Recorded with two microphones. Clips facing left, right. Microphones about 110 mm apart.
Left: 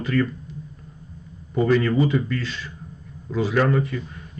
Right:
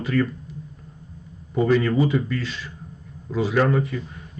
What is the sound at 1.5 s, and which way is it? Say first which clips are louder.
Speech: even; 5° right (ahead or behind).